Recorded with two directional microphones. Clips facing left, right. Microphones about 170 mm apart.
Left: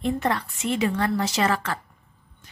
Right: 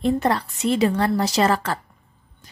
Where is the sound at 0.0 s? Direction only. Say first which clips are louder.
Right 4 dB; 35° right (ahead or behind).